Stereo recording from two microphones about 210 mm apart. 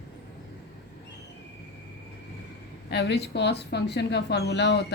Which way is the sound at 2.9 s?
55° left (ahead or behind).